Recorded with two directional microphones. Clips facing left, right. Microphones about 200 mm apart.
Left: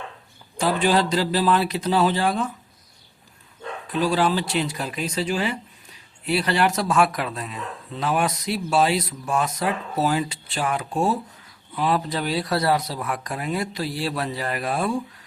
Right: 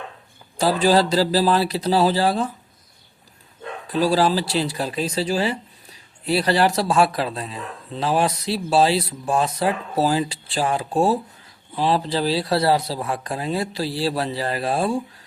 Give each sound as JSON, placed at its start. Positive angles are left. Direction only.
{"t": 0.6, "sound": "speech", "side_deg": -35}
{"t": 3.8, "sound": "speech", "side_deg": -35}